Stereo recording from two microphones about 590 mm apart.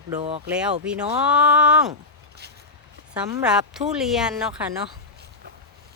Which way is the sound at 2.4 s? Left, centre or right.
Centre.